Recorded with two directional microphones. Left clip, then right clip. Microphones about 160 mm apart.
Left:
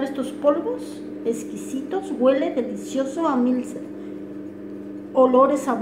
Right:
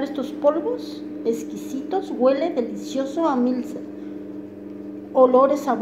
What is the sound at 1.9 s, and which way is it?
A woman's voice, 40° right (ahead or behind).